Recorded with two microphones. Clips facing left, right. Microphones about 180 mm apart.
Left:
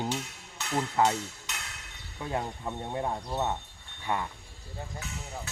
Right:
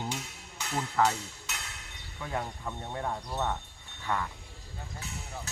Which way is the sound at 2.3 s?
20° left (ahead or behind).